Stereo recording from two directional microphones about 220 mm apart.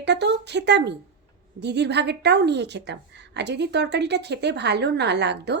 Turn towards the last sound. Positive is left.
turn(degrees=-50)  # may be behind; listen again after turning